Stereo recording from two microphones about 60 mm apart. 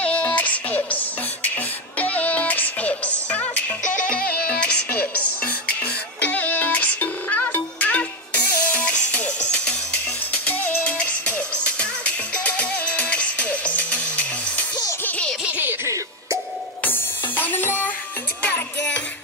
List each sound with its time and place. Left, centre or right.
0.0 s music: left
6.2 s music: left
15.4 s baby laughter: right
15.8 s cough: right
16.8 s music: left